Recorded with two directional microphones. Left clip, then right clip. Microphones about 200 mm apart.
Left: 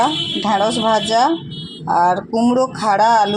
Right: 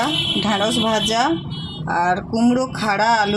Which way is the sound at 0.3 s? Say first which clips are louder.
Left 3 dB; 10° right (ahead or behind).